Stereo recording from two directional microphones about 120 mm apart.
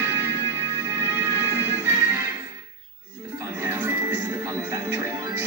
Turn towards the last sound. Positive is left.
turn(degrees=-20)  # may be behind; listen again after turning